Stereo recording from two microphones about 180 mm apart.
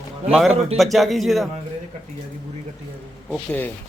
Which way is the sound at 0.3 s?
Centre (ahead or behind).